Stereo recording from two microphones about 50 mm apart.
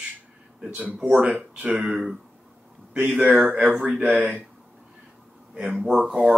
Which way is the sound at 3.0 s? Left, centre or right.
Right.